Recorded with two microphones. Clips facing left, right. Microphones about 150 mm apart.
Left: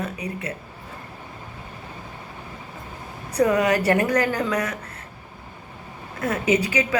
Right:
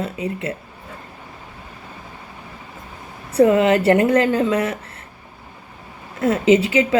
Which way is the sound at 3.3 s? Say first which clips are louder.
Right 5 dB; 25° right (ahead or behind).